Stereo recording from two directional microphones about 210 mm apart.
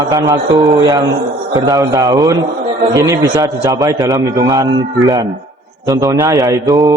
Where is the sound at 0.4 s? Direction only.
20° right (ahead or behind).